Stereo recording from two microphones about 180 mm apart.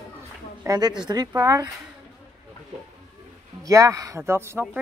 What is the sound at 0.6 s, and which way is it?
Speech, 20° right (ahead or behind).